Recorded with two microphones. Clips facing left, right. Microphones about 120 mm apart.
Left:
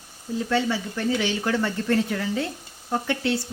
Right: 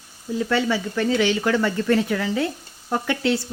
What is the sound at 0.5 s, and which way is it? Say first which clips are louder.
Speech: right 2 dB; 90° right.